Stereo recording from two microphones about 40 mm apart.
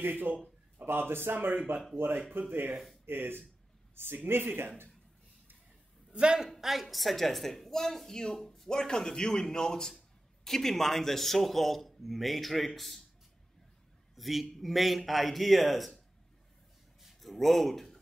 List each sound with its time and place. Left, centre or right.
0.0 s speech: right
0.8 s speech: right
2.0 s speech: right
3.1 s speech: right
3.9 s a man's voice: right
6.1 s a man's voice: right
6.6 s a man's voice: centre
8.4 s a sound: centre
8.6 s a man's voice: centre
14.1 s a man's voice: centre
17.0 s a sound: centre